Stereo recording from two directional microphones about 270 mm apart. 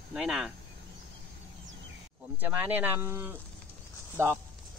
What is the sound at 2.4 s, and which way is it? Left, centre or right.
Speech, centre.